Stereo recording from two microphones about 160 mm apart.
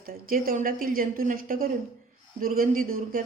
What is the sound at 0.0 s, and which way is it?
A woman's voice, 60° right (ahead or behind).